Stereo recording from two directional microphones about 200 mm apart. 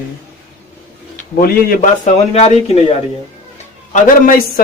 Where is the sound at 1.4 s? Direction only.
45° left (ahead or behind).